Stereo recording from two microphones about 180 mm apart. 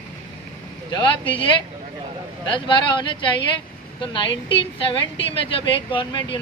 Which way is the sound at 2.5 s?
25° left (ahead or behind).